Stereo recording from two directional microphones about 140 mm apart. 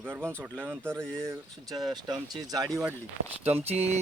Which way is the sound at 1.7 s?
30° right (ahead or behind).